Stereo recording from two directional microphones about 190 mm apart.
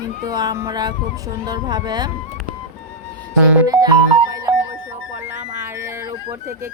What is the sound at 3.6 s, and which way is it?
Speech, 20° right (ahead or behind).